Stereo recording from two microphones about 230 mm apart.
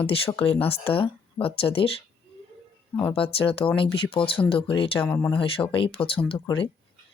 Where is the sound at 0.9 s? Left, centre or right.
Left.